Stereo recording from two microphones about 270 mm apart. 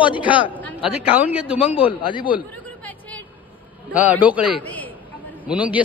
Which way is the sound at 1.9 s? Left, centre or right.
Centre.